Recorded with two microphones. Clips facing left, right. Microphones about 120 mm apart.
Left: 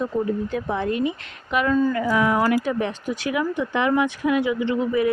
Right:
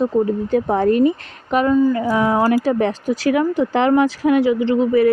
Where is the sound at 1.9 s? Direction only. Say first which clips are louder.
Right 3 dB; 30° right (ahead or behind).